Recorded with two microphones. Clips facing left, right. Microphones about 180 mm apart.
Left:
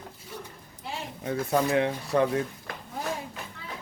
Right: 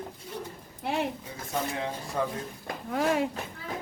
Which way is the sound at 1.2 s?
65° left (ahead or behind).